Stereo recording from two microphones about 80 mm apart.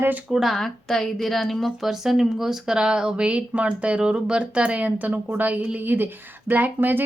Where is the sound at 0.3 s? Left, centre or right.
Centre.